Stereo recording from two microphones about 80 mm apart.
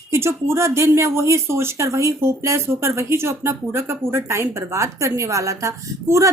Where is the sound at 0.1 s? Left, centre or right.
Right.